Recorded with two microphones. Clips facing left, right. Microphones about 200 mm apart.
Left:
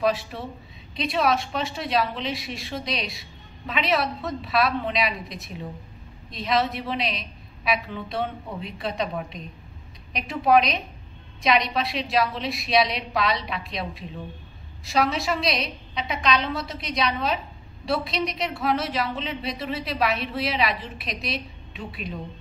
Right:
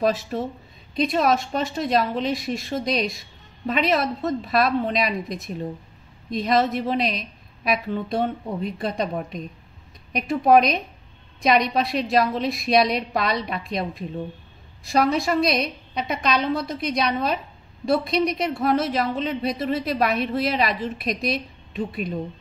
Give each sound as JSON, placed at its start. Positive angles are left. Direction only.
{"t": 0.0, "sound": "a woman's voice", "side_deg": -45}